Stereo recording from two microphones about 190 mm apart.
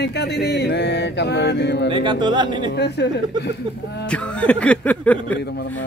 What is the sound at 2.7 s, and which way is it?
A man's voice, 60° left (ahead or behind).